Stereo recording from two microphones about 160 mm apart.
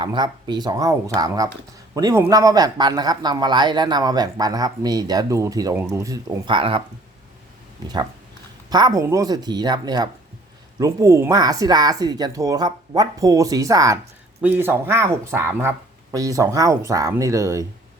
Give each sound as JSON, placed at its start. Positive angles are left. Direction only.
{"t": 0.0, "sound": "a man's voice", "side_deg": -30}
{"t": 6.5, "sound": "speech", "side_deg": -35}
{"t": 8.7, "sound": "a man's voice", "side_deg": -25}